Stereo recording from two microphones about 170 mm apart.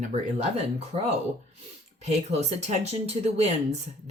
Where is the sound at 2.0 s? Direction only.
40° right (ahead or behind).